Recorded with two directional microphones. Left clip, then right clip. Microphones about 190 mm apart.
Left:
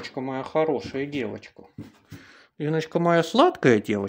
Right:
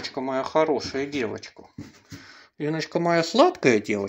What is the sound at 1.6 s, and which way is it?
Speech, 15° left (ahead or behind).